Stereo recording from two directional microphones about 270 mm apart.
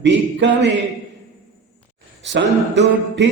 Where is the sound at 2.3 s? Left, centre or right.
Right.